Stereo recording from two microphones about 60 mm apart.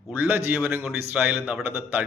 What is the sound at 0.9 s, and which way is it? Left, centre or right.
A man's voice, right.